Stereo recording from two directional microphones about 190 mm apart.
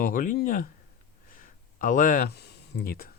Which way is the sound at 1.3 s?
45° left (ahead or behind).